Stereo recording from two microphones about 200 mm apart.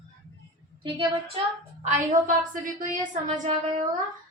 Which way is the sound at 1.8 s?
40° right (ahead or behind).